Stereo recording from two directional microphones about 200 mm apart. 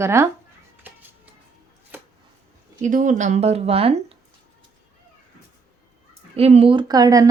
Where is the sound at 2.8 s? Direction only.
40° right (ahead or behind).